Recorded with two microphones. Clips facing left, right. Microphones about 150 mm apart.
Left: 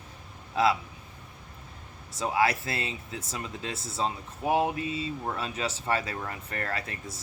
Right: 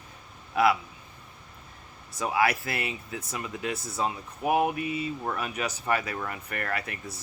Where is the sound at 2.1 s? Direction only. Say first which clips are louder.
Even; 25° left (ahead or behind).